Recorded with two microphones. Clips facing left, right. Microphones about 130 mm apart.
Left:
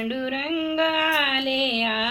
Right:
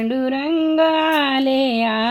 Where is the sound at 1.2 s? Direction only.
50° right (ahead or behind).